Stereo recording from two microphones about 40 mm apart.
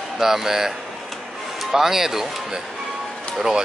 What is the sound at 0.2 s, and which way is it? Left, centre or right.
Speech, centre.